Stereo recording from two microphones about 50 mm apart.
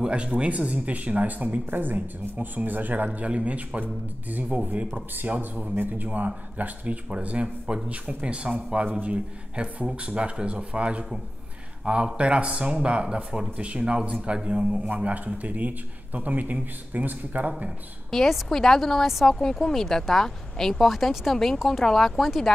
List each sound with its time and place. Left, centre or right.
0.0 s a man's voice: right
15.0 s a man's voice: right
18.1 s speech: centre